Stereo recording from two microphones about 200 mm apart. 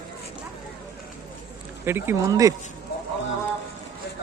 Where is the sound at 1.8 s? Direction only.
10° right (ahead or behind).